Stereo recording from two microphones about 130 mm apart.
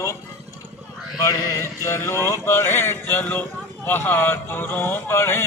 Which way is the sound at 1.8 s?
20° left (ahead or behind).